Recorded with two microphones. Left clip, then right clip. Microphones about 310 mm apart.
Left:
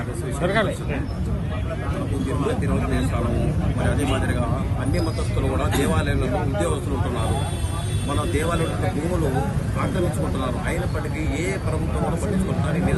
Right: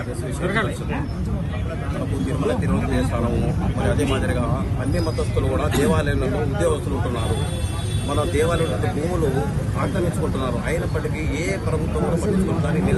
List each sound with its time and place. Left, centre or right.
0.4 s speech: left
5.8 s speech: centre
8.1 s speech: centre